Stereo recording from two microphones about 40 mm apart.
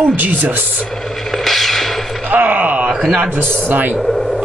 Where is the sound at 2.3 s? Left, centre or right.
Right.